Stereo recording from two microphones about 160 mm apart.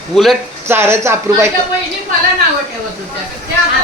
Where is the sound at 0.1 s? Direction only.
Centre (ahead or behind).